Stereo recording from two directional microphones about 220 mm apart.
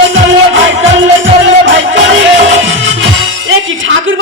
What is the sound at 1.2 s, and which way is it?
Music, 60° right (ahead or behind).